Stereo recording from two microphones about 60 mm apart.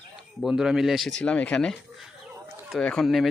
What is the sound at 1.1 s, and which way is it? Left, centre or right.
Speech, centre.